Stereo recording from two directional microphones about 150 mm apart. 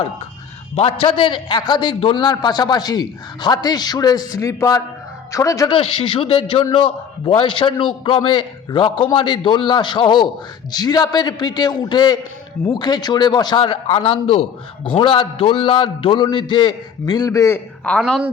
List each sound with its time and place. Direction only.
0.8 s a man's voice: 40° left (ahead or behind); by 5.7 s 20° left (ahead or behind)
5.7 s a man's voice: 40° left (ahead or behind); by 17.6 s 20° left (ahead or behind)
17.8 s a woman's voice: 5° left (ahead or behind)